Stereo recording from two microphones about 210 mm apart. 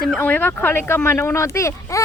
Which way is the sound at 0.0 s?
5° left (ahead or behind).